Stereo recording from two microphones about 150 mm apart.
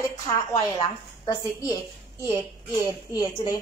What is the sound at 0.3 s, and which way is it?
A woman's voice, 25° left (ahead or behind).